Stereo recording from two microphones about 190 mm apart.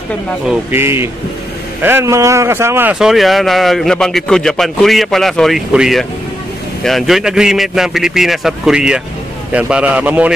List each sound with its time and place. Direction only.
0.5 s a man's voice: 10° right (ahead or behind)